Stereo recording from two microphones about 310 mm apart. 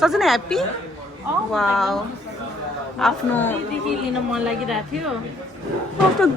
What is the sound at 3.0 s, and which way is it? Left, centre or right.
Speech, centre.